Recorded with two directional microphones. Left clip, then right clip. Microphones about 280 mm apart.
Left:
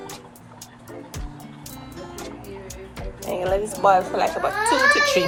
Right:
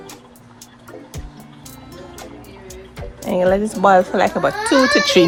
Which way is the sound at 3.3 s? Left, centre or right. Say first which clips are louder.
Right 7 dB; right.